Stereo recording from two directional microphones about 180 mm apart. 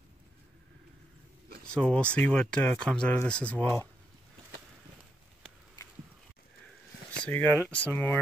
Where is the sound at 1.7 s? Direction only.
5° left (ahead or behind).